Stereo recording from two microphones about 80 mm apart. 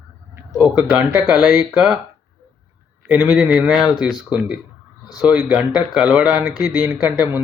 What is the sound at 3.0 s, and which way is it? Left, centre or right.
Speech, right.